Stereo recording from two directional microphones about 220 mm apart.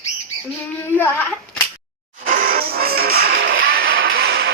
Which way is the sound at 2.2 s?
35° right (ahead or behind).